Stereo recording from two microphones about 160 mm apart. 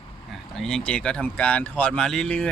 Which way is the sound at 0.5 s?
Centre (ahead or behind).